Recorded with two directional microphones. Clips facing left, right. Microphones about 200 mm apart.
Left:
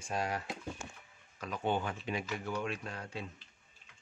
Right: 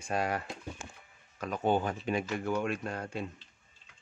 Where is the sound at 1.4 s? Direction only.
45° right (ahead or behind).